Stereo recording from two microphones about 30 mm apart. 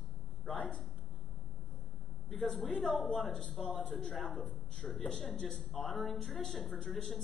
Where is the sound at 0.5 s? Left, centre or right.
Left.